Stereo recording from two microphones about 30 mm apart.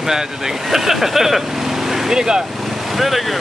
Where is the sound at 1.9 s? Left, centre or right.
Centre.